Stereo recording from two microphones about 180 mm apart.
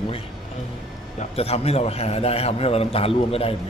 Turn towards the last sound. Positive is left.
turn(degrees=35)  # may be behind; listen again after turning